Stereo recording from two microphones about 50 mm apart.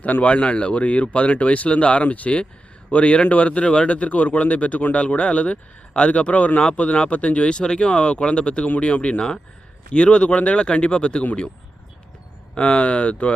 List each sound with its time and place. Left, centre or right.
0.0 s speech: left
12.5 s speech: left